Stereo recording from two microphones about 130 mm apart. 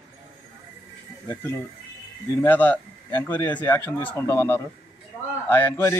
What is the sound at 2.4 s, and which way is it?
Speech, 15° left (ahead or behind).